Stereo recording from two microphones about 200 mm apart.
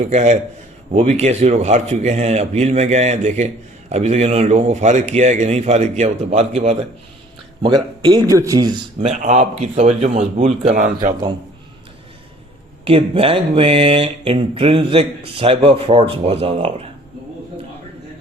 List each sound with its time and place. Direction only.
0.0 s speech: 35° right (ahead or behind); by 8.7 s 20° right (ahead or behind)
9.0 s speech: 35° right (ahead or behind)
12.8 s speech: 30° right (ahead or behind)